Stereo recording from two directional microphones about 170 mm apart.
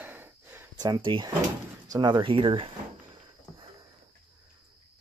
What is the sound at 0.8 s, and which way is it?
Speech, 25° right (ahead or behind).